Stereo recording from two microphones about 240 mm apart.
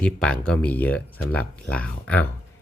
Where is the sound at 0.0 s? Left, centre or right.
Centre.